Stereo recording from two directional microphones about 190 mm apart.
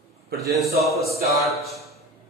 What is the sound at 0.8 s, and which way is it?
A man's voice, centre (ahead or behind).